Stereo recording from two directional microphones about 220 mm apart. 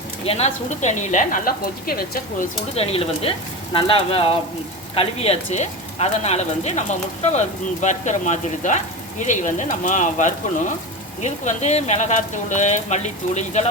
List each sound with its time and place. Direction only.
0.3 s speech: 30° left (ahead or behind)
2.7 s speech: 25° left (ahead or behind)